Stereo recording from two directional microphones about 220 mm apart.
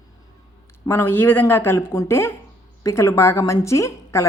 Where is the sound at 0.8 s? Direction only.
10° left (ahead or behind).